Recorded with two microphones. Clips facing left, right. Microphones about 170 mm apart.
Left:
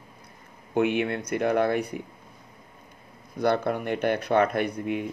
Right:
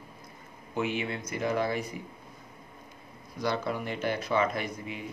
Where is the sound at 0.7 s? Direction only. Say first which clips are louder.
Left 7 dB; 60° left (ahead or behind).